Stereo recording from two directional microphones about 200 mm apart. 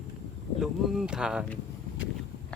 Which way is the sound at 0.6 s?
Centre (ahead or behind).